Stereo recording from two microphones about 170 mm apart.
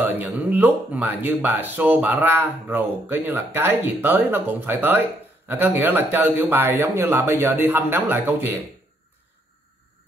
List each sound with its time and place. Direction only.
0.2 s speech: 10° right (ahead or behind)